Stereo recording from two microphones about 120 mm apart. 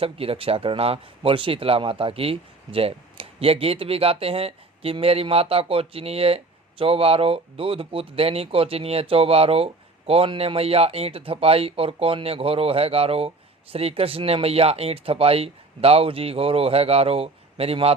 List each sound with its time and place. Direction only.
0.0 s speech: 55° right (ahead or behind)